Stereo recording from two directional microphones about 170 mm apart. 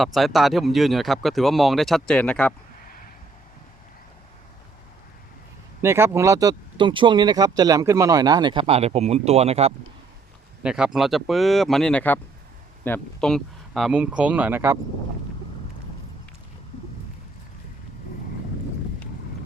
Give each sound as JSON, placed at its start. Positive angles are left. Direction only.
{"t": 0.0, "sound": "speech", "side_deg": 0}
{"t": 5.8, "sound": "speech", "side_deg": -15}
{"t": 10.6, "sound": "speech", "side_deg": -5}